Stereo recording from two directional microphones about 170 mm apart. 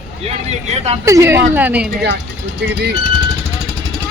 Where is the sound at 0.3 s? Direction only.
40° right (ahead or behind).